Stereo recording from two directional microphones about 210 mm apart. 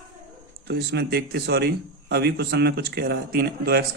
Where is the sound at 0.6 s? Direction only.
50° right (ahead or behind).